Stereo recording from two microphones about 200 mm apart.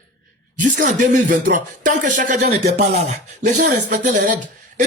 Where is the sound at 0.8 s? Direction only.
40° right (ahead or behind).